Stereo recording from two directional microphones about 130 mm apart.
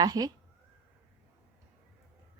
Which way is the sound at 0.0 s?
30° right (ahead or behind).